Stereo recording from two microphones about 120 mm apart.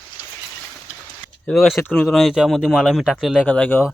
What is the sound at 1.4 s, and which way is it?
Speech, centre (ahead or behind).